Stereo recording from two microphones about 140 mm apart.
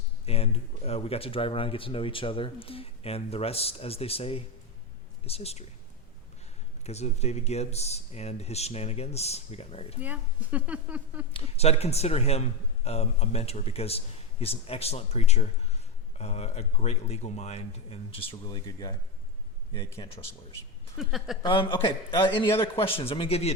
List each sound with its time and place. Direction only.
0.3 s speech: 45° left (ahead or behind)
6.8 s speech: 50° left (ahead or behind)
10.0 s speech: 10° right (ahead or behind)
11.3 s speech: 45° left (ahead or behind); by 20.2 s 20° left (ahead or behind)
21.0 s a woman's voice: centre (ahead or behind)
21.4 s speech: 40° left (ahead or behind)